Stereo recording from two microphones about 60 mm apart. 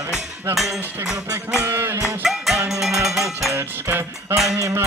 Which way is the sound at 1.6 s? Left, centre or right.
Right.